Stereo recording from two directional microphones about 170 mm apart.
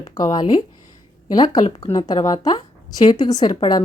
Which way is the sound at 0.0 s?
25° left (ahead or behind).